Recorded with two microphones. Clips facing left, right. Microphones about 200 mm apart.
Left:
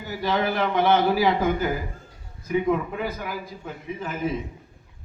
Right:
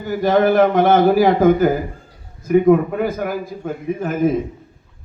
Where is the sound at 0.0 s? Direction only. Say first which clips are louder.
Right 10 dB; 50° right (ahead or behind).